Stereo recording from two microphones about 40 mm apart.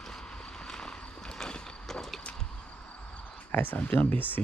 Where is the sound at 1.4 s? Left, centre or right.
Centre.